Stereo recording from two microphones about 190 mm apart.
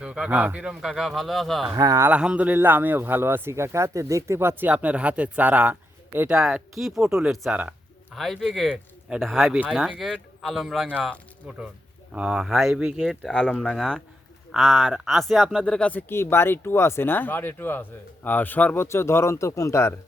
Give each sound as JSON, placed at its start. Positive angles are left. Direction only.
{"t": 0.0, "sound": "speech", "side_deg": -5}
{"t": 1.7, "sound": "speech", "side_deg": -15}
{"t": 2.0, "sound": "speech", "side_deg": -5}